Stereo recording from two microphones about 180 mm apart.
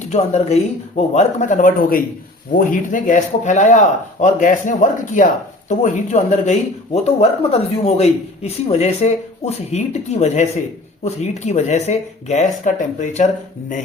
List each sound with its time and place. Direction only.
0.1 s speech: 40° left (ahead or behind)